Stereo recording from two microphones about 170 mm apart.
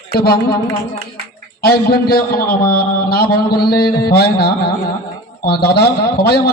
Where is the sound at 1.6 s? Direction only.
65° left (ahead or behind).